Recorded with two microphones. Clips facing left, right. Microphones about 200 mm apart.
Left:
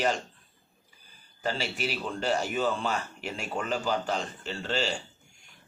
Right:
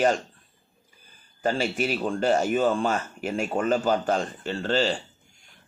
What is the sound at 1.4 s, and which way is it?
Speech, 50° right (ahead or behind).